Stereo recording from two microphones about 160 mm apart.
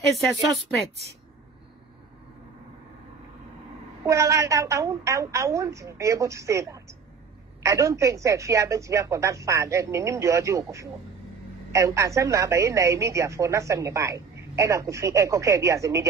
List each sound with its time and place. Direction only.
4.0 s a woman's voice: 20° right (ahead or behind)